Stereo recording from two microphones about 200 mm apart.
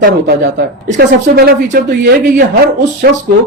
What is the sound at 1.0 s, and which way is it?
Speech, 55° right (ahead or behind).